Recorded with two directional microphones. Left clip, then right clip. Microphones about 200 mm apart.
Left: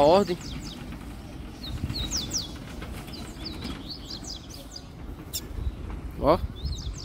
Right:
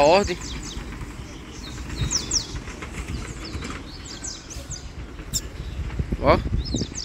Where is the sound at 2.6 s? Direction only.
55° left (ahead or behind).